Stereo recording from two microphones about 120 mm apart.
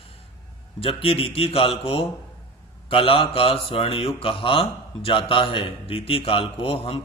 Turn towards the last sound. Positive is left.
turn(degrees=50)  # may be behind; listen again after turning